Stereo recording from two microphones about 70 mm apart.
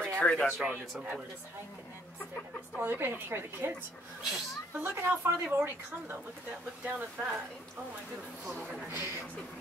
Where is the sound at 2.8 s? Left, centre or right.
Right.